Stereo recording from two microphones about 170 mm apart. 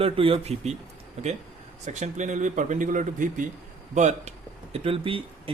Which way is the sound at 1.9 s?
45° right (ahead or behind).